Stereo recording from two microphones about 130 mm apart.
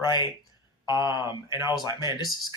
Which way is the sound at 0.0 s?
35° left (ahead or behind).